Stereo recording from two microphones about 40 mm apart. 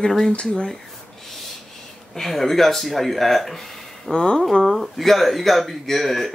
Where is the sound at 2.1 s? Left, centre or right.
Centre.